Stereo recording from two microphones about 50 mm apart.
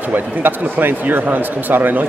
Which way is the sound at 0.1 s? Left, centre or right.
Right.